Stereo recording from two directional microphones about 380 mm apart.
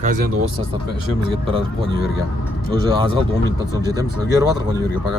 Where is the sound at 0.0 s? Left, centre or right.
Right.